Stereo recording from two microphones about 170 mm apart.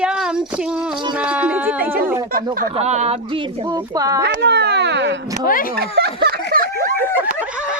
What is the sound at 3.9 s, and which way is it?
Speech, 20° right (ahead or behind).